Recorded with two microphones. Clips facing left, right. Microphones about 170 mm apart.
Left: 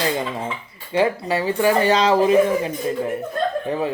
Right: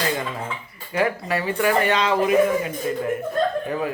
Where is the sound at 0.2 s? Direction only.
25° left (ahead or behind).